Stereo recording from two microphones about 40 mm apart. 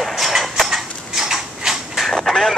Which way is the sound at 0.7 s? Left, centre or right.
Centre.